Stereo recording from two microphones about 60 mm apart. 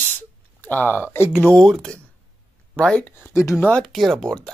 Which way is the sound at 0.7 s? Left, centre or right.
Left.